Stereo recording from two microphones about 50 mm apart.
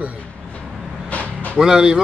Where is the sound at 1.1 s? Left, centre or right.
Left.